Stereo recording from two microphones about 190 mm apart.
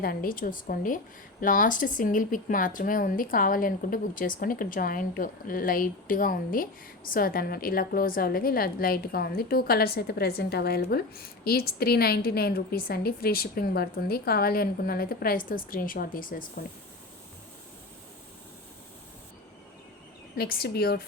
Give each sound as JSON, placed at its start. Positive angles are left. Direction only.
{"t": 0.0, "sound": "speech", "side_deg": 50}
{"t": 20.3, "sound": "speech", "side_deg": 55}